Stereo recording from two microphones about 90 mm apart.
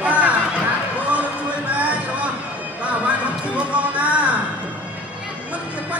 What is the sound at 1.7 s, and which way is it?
Music, 15° right (ahead or behind).